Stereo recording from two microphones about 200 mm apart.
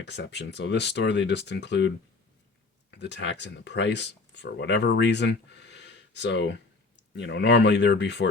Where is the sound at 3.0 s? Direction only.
60° left (ahead or behind).